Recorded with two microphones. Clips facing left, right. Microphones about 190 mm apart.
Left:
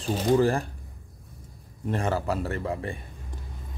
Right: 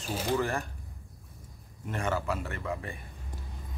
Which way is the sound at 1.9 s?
35° left (ahead or behind).